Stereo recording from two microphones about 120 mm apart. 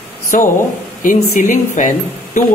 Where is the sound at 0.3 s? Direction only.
90° left.